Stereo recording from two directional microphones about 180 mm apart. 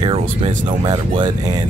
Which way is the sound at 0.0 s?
30° right (ahead or behind).